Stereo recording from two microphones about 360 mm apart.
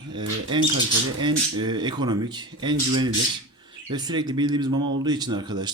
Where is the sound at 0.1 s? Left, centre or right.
Centre.